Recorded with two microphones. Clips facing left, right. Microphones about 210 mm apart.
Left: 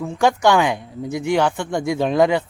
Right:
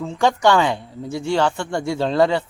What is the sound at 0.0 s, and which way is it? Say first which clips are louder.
Speech: left 1 dB; 10° left (ahead or behind).